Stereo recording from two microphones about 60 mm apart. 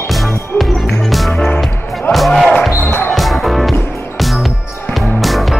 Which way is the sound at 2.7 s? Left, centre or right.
Left.